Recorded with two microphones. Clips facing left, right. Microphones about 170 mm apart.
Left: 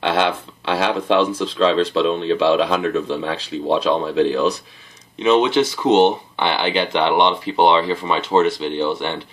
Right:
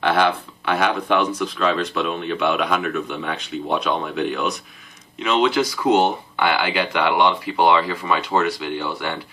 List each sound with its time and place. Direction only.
0.0 s speech: 25° left (ahead or behind)